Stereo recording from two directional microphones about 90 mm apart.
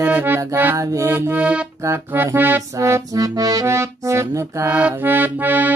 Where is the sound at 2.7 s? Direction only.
35° right (ahead or behind).